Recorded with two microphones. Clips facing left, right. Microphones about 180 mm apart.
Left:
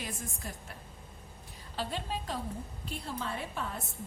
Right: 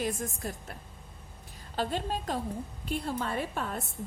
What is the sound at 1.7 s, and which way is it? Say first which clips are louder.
A woman's voice: right 5 dB; 45° right (ahead or behind).